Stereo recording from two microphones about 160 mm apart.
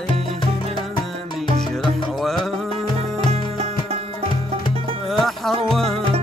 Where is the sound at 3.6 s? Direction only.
45° right (ahead or behind).